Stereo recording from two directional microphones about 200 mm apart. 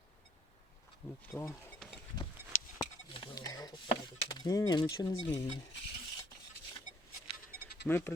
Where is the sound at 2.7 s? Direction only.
20° left (ahead or behind).